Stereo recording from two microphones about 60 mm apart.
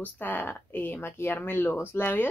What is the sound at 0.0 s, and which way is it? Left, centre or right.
Speech, left.